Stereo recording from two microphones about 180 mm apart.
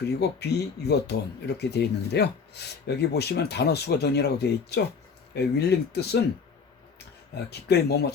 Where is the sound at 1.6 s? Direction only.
65° left (ahead or behind).